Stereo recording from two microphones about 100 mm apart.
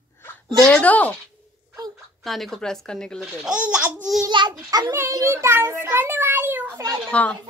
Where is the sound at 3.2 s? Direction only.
10° right (ahead or behind).